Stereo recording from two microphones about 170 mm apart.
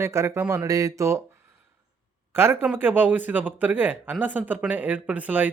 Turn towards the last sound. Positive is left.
turn(degrees=-10)  # may be behind; listen again after turning